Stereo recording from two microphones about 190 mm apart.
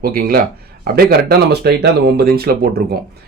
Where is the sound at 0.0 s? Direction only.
50° right (ahead or behind).